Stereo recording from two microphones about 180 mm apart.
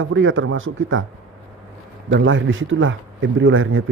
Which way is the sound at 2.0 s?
85° right.